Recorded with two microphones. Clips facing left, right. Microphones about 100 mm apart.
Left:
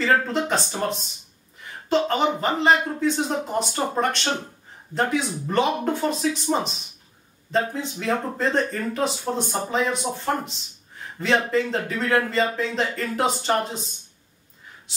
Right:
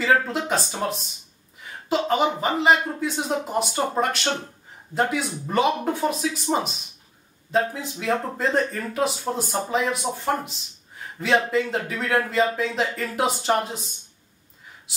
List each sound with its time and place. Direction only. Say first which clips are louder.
0.0 s speech: even; 5° right (ahead or behind)